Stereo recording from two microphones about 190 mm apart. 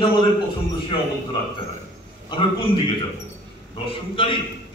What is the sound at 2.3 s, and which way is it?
Speech, 25° left (ahead or behind).